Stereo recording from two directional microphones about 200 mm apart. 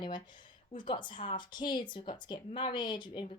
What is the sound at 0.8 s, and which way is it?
Speech, 25° left (ahead or behind).